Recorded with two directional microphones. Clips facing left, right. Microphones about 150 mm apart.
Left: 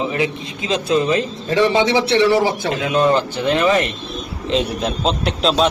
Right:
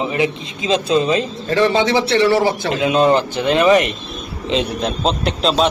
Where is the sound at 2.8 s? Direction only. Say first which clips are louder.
Right 2 dB; 20° right (ahead or behind).